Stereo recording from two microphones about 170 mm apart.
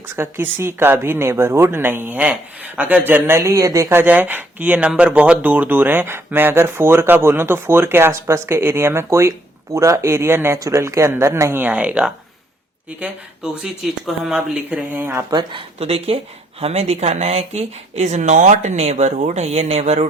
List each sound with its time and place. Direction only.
0.2 s speech: 15° right (ahead or behind)
15.4 s speech: 30° right (ahead or behind)